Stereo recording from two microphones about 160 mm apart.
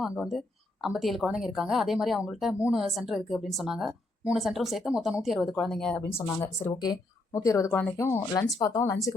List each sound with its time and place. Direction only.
0.0 s a woman's voice: centre (ahead or behind)
6.1 s speech: 20° left (ahead or behind)